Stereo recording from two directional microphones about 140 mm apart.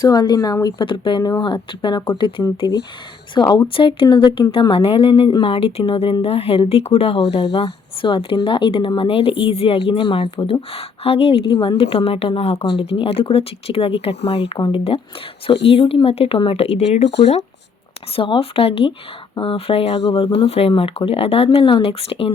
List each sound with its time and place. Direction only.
0.0 s speech: 30° left (ahead or behind); by 17.4 s 50° left (ahead or behind)
18.2 s speech: 40° left (ahead or behind)